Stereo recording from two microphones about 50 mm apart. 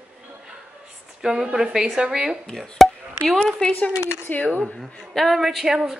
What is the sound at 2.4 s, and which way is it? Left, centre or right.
Speech, centre.